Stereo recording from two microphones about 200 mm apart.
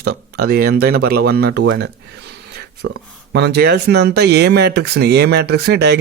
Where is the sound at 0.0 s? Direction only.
50° right (ahead or behind).